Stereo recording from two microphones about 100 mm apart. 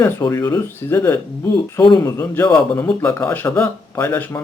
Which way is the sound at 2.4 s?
15° left (ahead or behind).